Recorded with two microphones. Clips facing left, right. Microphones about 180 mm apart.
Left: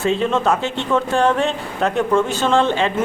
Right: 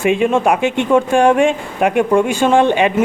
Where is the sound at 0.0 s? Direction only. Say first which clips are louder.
Right 4 dB; 15° right (ahead or behind).